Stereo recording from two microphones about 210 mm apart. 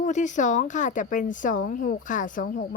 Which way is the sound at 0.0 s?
35° left (ahead or behind).